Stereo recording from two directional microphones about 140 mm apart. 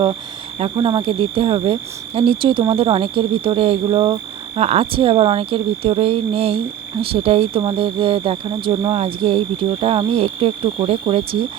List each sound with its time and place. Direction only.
0.6 s speech: 35° right (ahead or behind)